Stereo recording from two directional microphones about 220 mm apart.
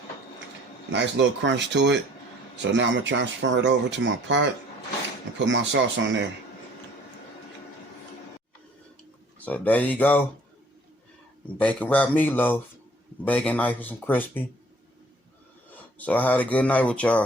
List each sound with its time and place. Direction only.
0.9 s speech: 55° right (ahead or behind)
5.5 s speech: 55° right (ahead or behind)
9.4 s speech: 5° left (ahead or behind)
11.6 s speech: 5° left (ahead or behind)
15.7 s speech: 5° left (ahead or behind)